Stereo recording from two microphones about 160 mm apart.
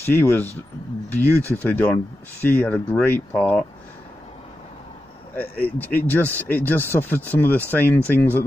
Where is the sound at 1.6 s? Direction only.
10° left (ahead or behind).